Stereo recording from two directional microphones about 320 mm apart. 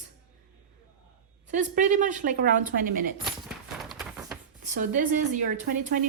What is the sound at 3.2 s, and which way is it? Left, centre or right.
Horse, centre.